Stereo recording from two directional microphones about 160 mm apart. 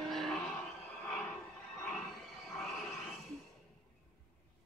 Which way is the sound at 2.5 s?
Centre (ahead or behind).